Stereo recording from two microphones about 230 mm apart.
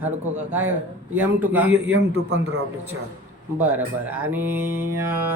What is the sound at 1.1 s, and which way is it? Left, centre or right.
Speech, centre.